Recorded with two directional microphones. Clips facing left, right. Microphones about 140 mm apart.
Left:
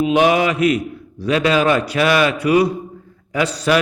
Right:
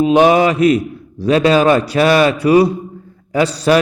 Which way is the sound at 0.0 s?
35° right (ahead or behind).